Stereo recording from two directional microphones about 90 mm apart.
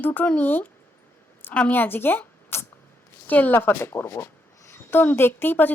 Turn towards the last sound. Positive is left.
turn(degrees=25)  # may be behind; listen again after turning